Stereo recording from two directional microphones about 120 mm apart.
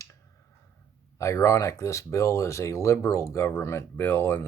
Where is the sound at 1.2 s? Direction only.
25° left (ahead or behind).